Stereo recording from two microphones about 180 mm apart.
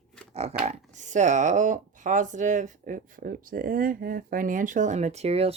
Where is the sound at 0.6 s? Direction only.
40° right (ahead or behind).